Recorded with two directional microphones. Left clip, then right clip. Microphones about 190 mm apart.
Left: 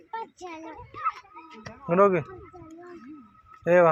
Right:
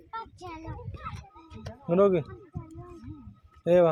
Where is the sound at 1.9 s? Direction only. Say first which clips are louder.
Left 2 dB; 25° right (ahead or behind).